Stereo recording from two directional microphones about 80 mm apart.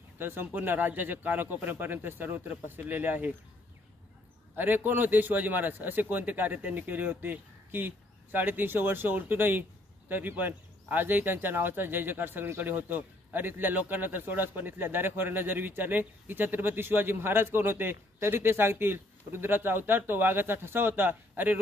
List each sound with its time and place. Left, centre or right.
0.2 s a man's voice: right
4.6 s a man's voice: right